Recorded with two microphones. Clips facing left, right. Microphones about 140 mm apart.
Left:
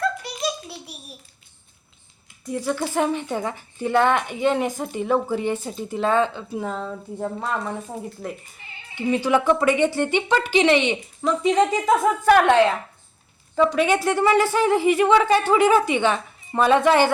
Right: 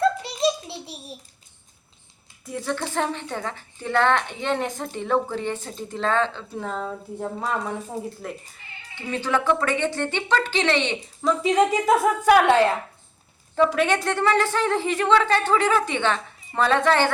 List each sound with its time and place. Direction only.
0.0 s a sound: 25° right (ahead or behind)
2.4 s a woman's voice: centre (ahead or behind)
9.0 s a woman's voice: 15° left (ahead or behind)
11.3 s a woman's voice: 5° right (ahead or behind)
13.6 s a woman's voice: centre (ahead or behind)